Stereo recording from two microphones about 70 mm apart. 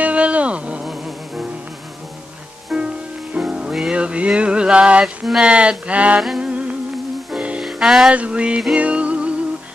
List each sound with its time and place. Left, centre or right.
0.0 s a sound: centre
0.8 s music: centre
2.7 s music: centre
3.3 s music: centre
3.7 s a sound: centre
6.4 s music: centre
7.6 s music: centre
8.1 s a sound: centre
8.7 s music: centre